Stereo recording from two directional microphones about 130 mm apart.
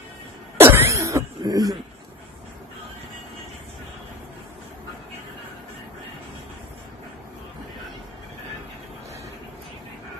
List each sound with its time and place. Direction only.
0.6 s cough: 20° right (ahead or behind)